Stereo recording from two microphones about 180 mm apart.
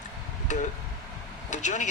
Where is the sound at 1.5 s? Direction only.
40° left (ahead or behind).